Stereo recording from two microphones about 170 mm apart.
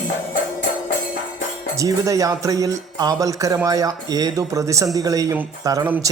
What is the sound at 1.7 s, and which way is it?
Speech, 20° right (ahead or behind).